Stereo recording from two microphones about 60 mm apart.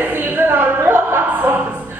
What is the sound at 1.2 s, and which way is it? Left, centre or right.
Choir, right.